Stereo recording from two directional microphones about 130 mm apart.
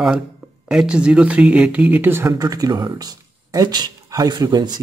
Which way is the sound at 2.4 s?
30° right (ahead or behind).